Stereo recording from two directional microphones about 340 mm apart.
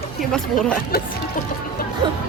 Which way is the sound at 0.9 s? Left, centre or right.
Left.